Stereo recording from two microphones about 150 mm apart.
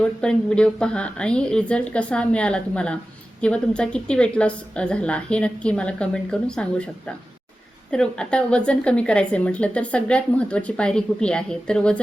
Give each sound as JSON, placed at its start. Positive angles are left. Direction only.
{"t": 0.0, "sound": "a woman's voice", "side_deg": 5}